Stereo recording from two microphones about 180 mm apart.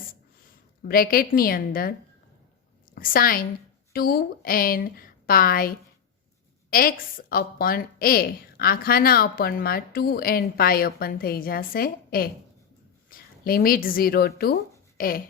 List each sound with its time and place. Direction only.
0.8 s a woman's voice: 55° left (ahead or behind)